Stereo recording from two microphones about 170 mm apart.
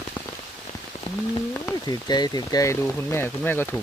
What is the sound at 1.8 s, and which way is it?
Speech, 25° left (ahead or behind).